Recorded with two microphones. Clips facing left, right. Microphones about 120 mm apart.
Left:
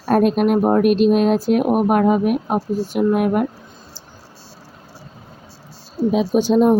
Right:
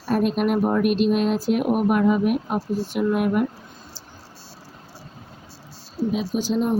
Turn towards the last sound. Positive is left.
turn(degrees=55)  # may be behind; listen again after turning